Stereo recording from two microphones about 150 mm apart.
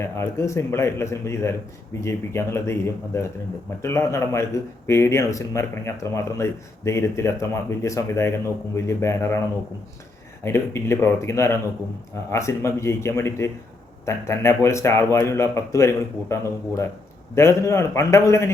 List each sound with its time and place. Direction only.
0.2 s speech: 20° left (ahead or behind)
10.4 s speech: 15° left (ahead or behind)